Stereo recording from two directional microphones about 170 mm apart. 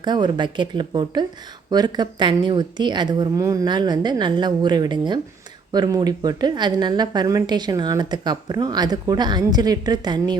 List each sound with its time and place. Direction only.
0.0 s a woman's voice: 25° right (ahead or behind)